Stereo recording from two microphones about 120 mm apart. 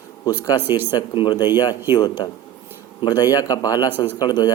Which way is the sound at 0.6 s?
15° right (ahead or behind).